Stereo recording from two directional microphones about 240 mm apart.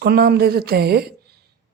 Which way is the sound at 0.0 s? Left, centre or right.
Right.